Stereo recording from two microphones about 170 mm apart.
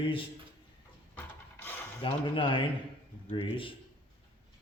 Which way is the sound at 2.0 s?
30° left (ahead or behind).